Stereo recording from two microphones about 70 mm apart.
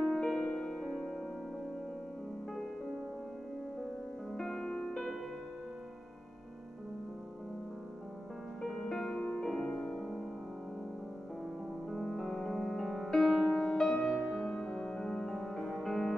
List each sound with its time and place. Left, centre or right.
0.0 s music: centre
4.3 s music: centre
8.6 s music: centre
11.9 s music: centre